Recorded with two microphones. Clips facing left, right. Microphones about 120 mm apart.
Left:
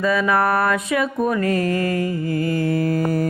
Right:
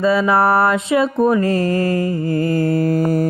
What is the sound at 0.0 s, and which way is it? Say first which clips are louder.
Speech: right 4 dB; 25° right (ahead or behind).